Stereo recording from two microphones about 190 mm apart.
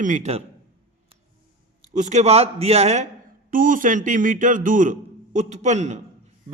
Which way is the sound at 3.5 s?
45° right (ahead or behind).